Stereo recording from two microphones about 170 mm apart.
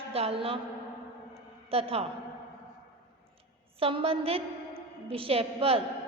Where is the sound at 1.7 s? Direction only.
35° right (ahead or behind).